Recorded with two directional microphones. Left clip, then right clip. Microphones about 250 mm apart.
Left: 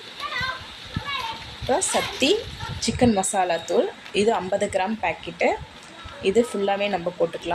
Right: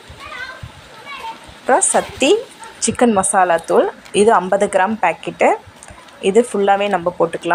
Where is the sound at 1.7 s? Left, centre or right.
Centre.